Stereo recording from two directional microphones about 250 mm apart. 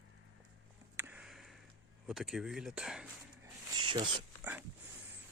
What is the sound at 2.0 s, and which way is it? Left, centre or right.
Speech, centre.